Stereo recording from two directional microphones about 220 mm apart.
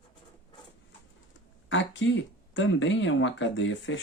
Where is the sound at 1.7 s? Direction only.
55° left (ahead or behind).